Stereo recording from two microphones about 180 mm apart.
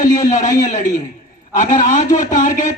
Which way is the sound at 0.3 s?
45° left (ahead or behind).